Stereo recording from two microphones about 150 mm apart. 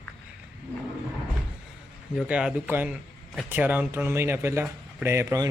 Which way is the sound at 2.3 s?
5° right (ahead or behind).